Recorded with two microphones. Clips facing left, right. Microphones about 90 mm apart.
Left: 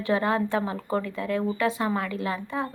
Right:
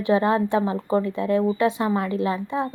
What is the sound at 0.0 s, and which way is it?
A woman's voice, 20° right (ahead or behind).